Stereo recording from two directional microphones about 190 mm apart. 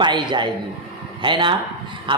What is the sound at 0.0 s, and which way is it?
A man's voice, 25° right (ahead or behind).